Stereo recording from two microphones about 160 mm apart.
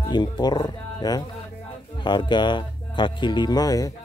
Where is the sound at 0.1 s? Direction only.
25° left (ahead or behind).